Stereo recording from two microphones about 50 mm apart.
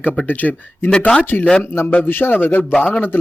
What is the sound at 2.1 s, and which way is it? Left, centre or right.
Speech, left.